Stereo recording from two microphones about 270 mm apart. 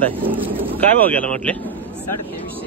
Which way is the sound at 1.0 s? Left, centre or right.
Centre.